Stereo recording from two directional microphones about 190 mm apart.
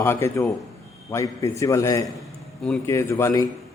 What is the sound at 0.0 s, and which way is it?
A man's voice, 15° left (ahead or behind).